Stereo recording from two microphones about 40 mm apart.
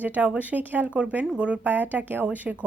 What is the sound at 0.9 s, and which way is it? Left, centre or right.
Speech, right.